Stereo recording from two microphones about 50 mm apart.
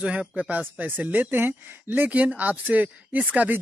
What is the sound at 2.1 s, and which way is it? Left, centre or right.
Speech, right.